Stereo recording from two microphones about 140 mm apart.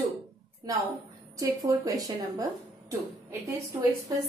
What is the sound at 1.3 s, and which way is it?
A woman's voice, 25° right (ahead or behind).